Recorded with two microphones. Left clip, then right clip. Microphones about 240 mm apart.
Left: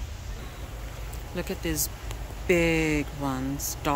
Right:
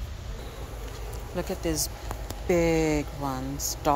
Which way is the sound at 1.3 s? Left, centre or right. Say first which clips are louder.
Right 1 dB; centre.